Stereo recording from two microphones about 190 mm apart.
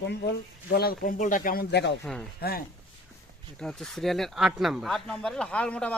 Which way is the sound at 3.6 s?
Centre (ahead or behind).